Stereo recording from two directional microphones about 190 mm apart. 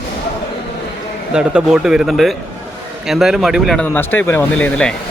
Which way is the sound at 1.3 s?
5° right (ahead or behind).